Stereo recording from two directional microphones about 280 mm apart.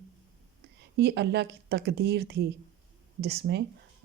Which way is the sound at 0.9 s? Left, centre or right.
Right.